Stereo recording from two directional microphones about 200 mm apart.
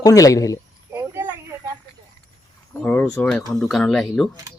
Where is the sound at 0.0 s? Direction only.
15° left (ahead or behind).